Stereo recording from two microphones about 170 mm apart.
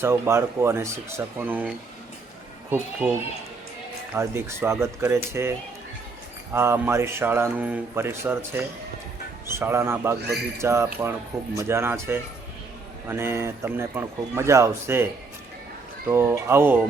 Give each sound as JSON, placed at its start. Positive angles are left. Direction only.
{"t": 0.0, "sound": "a man's voice", "side_deg": -15}
{"t": 4.1, "sound": "a man's voice", "side_deg": -15}
{"t": 10.2, "sound": "a man's voice", "side_deg": -75}
{"t": 10.6, "sound": "a man's voice", "side_deg": -15}
{"t": 16.0, "sound": "a man's voice", "side_deg": -15}